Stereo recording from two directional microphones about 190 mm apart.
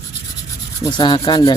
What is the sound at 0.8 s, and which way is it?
Speech, 25° left (ahead or behind).